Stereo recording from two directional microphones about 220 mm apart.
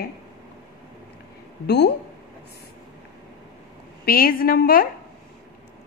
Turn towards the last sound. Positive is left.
turn(degrees=45)  # may be behind; listen again after turning